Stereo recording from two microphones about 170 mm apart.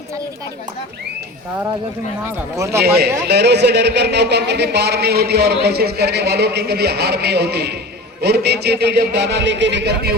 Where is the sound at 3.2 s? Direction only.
80° right.